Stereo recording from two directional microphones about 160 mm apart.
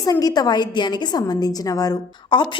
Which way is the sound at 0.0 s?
20° left (ahead or behind).